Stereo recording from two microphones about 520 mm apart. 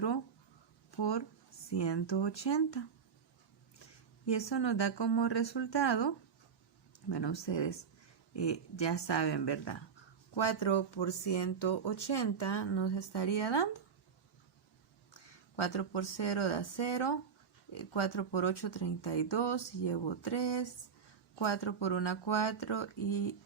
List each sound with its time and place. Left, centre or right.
0.9 s speech: left
4.3 s speech: left
15.5 s speech: left
17.7 s speech: left